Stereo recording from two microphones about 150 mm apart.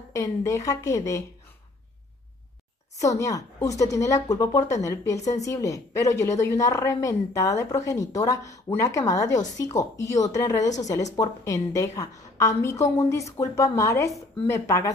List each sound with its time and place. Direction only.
0.1 s a woman's voice: 20° left (ahead or behind)
3.0 s a woman's voice: 20° left (ahead or behind)